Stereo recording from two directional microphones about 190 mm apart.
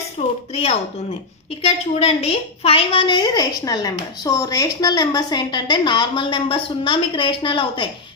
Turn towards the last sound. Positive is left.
turn(degrees=25)  # may be behind; listen again after turning